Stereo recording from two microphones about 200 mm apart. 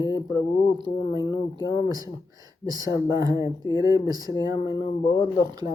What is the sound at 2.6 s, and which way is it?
Speech, 20° right (ahead or behind).